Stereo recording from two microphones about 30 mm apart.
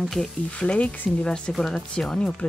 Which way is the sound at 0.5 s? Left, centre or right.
Left.